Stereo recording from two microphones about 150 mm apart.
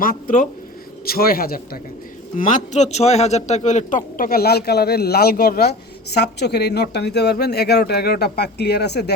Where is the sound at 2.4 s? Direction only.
55° left (ahead or behind).